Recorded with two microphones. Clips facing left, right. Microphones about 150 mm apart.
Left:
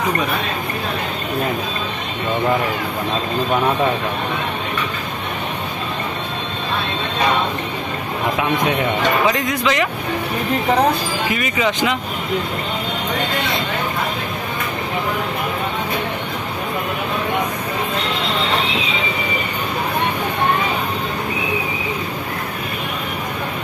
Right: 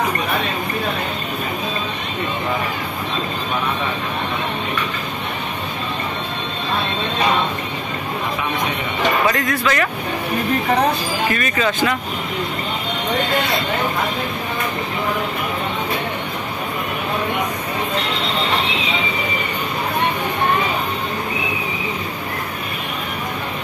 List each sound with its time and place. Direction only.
9.3 s speech: 15° left (ahead or behind)
11.3 s speech: 15° left (ahead or behind)